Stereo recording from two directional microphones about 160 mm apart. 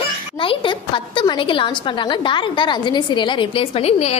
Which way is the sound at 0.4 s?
35° left (ahead or behind).